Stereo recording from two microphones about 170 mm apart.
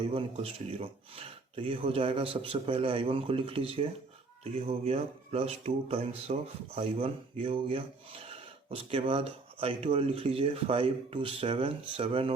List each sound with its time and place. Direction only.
0.0 s speech: 30° right (ahead or behind)